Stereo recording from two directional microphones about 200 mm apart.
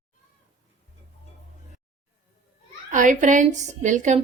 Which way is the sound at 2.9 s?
40° right (ahead or behind).